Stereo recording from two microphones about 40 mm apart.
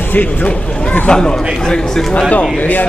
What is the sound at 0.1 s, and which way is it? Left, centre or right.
Speech, left.